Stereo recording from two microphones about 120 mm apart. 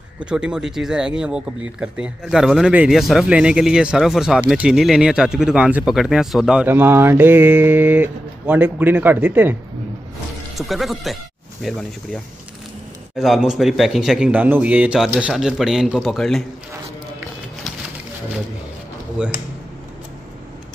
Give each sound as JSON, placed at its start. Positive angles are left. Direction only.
{"t": 0.2, "sound": "speech", "side_deg": -5}
{"t": 6.7, "sound": "speech", "side_deg": -15}
{"t": 10.6, "sound": "speech", "side_deg": 0}
{"t": 19.2, "sound": "speech", "side_deg": -10}